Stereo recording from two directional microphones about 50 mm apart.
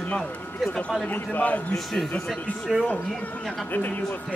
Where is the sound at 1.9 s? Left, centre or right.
Centre.